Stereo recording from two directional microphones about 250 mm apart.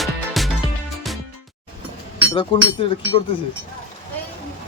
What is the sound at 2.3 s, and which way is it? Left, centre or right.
Speech, left.